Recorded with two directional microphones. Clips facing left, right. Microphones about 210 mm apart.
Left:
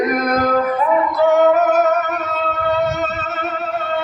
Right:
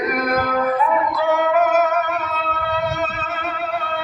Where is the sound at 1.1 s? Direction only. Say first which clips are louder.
Left 6 dB; 45° left (ahead or behind).